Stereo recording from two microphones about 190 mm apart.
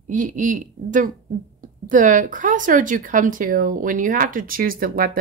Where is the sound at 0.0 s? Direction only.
45° right (ahead or behind).